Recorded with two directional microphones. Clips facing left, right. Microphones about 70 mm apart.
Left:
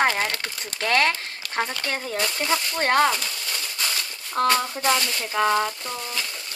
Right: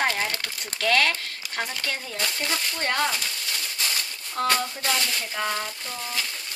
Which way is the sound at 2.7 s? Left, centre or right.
Left.